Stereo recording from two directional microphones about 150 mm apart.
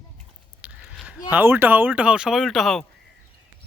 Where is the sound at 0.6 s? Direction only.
10° right (ahead or behind).